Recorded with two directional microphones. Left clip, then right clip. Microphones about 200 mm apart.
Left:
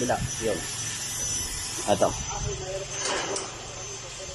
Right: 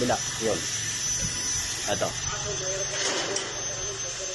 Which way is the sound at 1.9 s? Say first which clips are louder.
Left 6 dB; 20° left (ahead or behind).